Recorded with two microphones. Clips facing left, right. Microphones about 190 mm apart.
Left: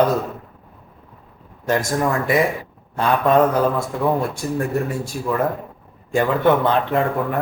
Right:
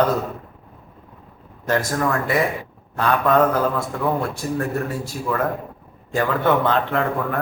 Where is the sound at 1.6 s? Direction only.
15° left (ahead or behind).